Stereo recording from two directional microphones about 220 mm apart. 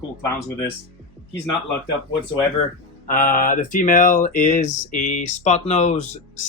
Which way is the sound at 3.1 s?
40° left (ahead or behind).